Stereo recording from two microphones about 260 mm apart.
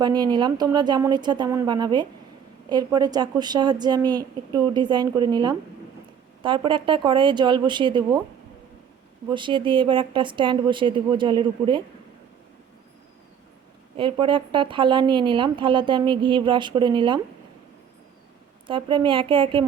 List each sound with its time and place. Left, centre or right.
0.0 s a woman's voice: centre
9.3 s speech: centre
13.9 s speech: centre
18.7 s speech: centre